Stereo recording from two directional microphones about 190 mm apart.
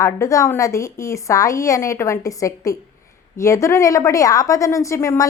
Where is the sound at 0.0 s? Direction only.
15° left (ahead or behind).